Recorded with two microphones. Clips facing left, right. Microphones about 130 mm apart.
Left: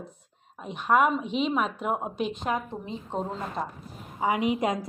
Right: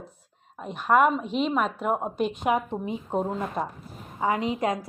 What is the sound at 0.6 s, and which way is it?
A woman's voice, centre (ahead or behind).